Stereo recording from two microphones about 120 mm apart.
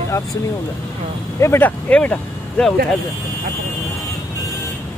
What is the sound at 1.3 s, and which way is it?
Speech, 20° left (ahead or behind).